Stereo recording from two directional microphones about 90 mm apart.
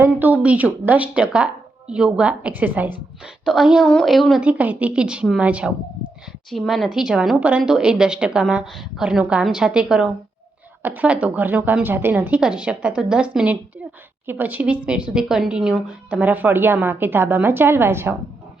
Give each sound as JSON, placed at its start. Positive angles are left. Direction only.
{"t": 0.0, "sound": "speech", "side_deg": -20}
{"t": 3.4, "sound": "speech", "side_deg": -5}
{"t": 3.8, "sound": "speech", "side_deg": 5}
{"t": 4.4, "sound": "speech", "side_deg": -15}
{"t": 6.5, "sound": "speech", "side_deg": 0}
{"t": 12.4, "sound": "speech", "side_deg": -10}